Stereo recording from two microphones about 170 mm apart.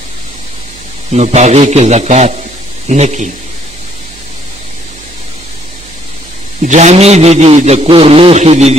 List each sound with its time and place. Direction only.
1.1 s a man's voice: 40° right (ahead or behind)
6.6 s a man's voice: 45° right (ahead or behind)